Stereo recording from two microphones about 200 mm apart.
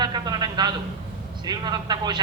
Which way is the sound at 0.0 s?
20° right (ahead or behind).